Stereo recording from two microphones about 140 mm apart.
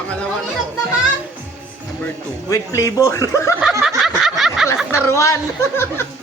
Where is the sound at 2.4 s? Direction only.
25° left (ahead or behind).